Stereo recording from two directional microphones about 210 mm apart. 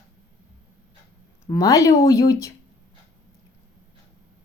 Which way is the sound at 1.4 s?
15° left (ahead or behind).